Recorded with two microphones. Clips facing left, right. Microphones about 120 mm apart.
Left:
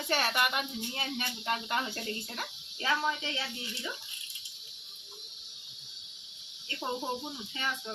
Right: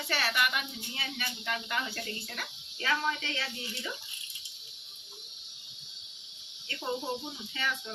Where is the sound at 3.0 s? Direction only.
10° left (ahead or behind).